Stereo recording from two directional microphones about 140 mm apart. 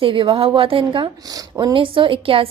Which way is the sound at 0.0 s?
40° right (ahead or behind).